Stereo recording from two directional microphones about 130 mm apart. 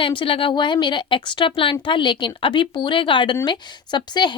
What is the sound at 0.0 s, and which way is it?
Speech, 40° left (ahead or behind).